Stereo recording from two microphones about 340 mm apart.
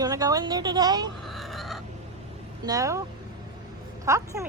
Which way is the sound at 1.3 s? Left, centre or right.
Centre.